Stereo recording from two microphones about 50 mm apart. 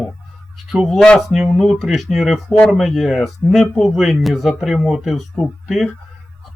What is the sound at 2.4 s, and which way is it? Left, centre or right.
Speech, centre.